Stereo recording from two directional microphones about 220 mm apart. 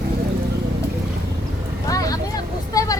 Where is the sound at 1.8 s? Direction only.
15° left (ahead or behind).